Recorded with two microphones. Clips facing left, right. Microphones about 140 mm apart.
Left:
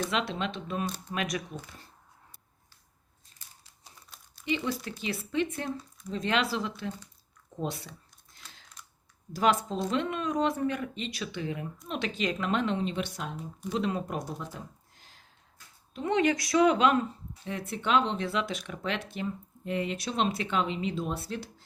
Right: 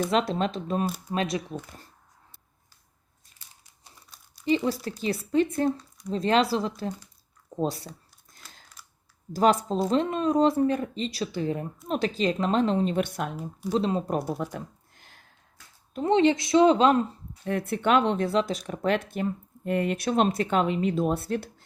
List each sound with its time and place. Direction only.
0.1 s speech: 40° right (ahead or behind)
4.4 s speech: 35° right (ahead or behind)
7.5 s a sound: 35° right (ahead or behind)
9.3 s speech: 35° right (ahead or behind); by 13.3 s 55° right (ahead or behind)
13.7 s speech: 35° right (ahead or behind)
14.5 s a sound: 55° right (ahead or behind)
16.0 s speech: 30° right (ahead or behind)
17.4 s speech: 55° right (ahead or behind)
18.3 s speech: 35° right (ahead or behind)